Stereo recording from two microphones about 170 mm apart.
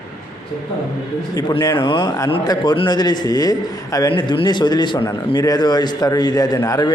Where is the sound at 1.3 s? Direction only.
20° left (ahead or behind).